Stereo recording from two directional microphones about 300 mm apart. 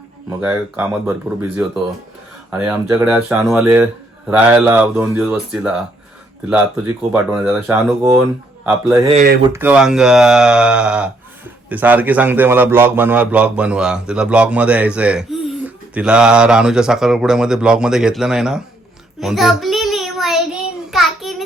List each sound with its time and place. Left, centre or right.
0.3 s a man's voice: centre
7.1 s a man's voice: centre
9.0 s speech: right
9.5 s a man's voice: centre
19.2 s child singing: centre